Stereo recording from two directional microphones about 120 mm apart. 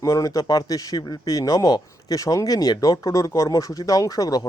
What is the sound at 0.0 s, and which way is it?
Speech, 30° left (ahead or behind).